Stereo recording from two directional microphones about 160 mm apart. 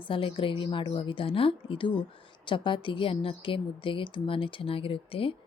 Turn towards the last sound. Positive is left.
turn(degrees=35)  # may be behind; listen again after turning